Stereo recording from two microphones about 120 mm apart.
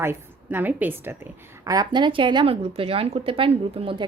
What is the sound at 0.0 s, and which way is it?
A woman's voice, 20° right (ahead or behind).